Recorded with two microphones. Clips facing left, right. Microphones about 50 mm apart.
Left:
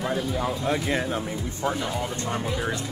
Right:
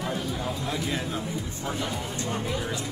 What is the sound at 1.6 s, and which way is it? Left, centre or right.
Speech, centre.